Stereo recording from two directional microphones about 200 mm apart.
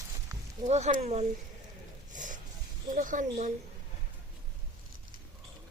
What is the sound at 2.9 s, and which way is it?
Speech, 40° right (ahead or behind).